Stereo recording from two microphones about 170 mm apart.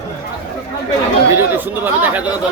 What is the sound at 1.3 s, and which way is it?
Speech, 10° right (ahead or behind).